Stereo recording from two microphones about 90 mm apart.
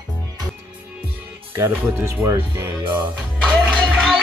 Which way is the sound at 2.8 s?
60° right (ahead or behind).